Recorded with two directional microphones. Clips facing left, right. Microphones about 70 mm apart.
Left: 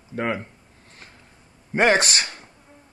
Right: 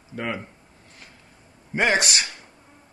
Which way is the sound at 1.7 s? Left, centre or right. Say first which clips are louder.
Left 3 dB; left.